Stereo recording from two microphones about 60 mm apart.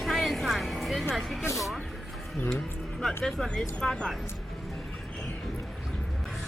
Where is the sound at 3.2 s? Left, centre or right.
Centre.